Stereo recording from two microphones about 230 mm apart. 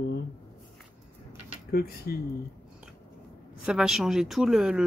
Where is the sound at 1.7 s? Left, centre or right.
Left.